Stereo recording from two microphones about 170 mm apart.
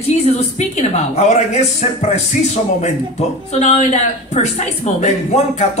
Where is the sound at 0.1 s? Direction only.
40° left (ahead or behind).